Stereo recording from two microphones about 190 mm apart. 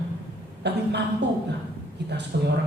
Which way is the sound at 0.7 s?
60° right (ahead or behind).